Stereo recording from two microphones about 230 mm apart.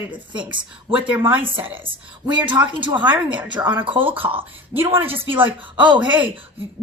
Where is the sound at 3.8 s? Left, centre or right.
Right.